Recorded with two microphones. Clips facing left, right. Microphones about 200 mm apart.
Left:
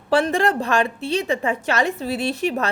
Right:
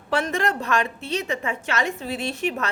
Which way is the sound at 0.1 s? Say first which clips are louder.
Left 5 dB; 30° left (ahead or behind).